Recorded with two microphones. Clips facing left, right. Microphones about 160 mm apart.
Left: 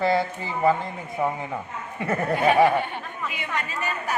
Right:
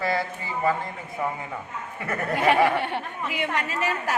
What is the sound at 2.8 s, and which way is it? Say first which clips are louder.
A woman's voice: right 1 dB; 75° right (ahead or behind).